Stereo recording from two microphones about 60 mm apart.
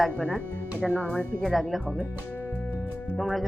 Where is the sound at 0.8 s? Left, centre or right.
Right.